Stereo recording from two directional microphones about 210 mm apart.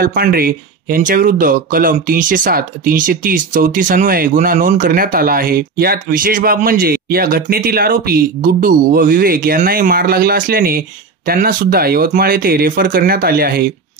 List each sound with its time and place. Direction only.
0.0 s speech: 45° right (ahead or behind)